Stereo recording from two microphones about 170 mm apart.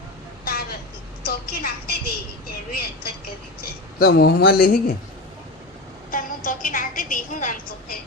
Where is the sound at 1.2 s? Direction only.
65° left (ahead or behind).